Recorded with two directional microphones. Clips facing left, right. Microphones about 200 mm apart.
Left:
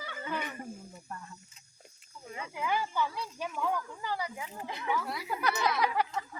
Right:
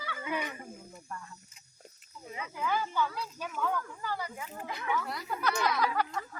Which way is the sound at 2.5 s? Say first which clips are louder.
Even; 10° left (ahead or behind).